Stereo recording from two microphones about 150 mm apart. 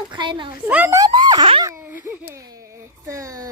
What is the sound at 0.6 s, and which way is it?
Speech, 10° right (ahead or behind).